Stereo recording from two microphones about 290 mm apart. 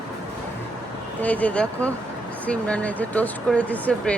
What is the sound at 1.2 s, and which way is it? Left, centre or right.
Speech, centre.